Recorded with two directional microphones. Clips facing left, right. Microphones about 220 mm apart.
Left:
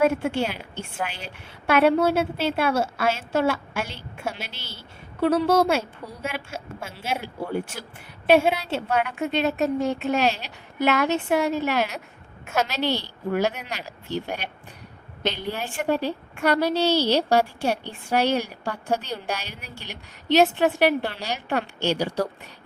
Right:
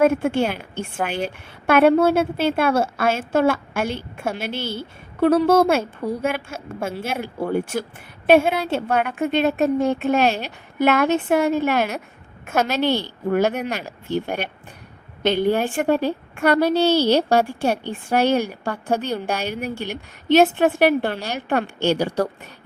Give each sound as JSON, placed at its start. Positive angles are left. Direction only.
{"t": 0.0, "sound": "a woman's voice", "side_deg": -50}